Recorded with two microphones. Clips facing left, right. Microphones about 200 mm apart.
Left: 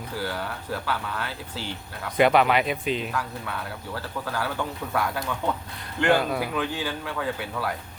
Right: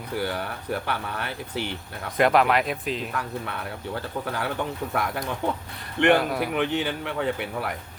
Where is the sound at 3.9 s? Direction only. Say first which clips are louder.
Right 1 dB; 25° right (ahead or behind).